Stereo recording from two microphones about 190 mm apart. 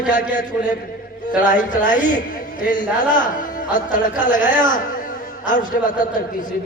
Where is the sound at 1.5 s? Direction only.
45° left (ahead or behind).